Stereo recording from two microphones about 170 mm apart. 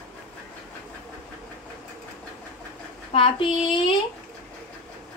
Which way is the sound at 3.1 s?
30° left (ahead or behind).